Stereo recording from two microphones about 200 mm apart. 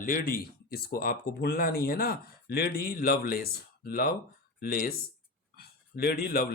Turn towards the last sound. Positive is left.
turn(degrees=50)  # may be behind; listen again after turning